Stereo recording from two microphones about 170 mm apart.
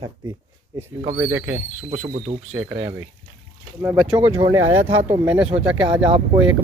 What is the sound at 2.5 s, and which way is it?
Speech, 10° right (ahead or behind).